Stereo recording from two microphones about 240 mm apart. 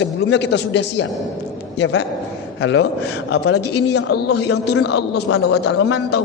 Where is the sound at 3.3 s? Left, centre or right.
Left.